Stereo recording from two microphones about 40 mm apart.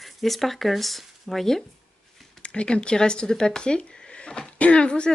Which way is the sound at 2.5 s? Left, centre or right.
Left.